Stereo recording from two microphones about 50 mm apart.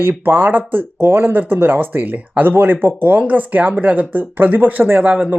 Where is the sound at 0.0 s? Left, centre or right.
Right.